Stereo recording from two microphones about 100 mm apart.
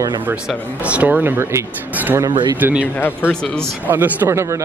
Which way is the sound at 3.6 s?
20° right (ahead or behind).